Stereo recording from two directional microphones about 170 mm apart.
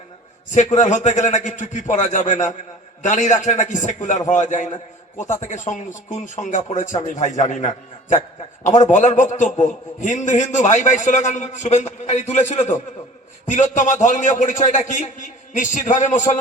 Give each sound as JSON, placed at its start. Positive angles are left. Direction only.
{"t": 0.5, "sound": "a man's voice", "side_deg": 45}